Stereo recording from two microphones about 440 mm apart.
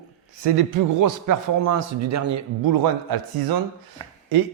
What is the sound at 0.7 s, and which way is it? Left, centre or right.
A man's voice, right.